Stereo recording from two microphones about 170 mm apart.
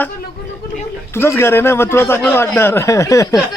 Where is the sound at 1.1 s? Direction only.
15° left (ahead or behind).